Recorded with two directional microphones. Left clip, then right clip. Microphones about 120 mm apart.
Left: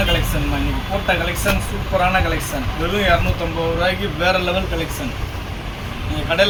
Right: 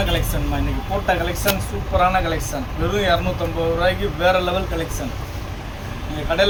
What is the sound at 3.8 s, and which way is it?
Speech, 15° right (ahead or behind).